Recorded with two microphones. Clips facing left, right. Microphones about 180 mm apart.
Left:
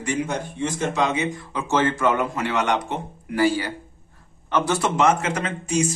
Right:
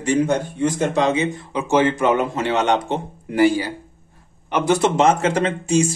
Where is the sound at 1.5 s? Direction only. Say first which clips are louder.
Right 5 dB; 15° right (ahead or behind).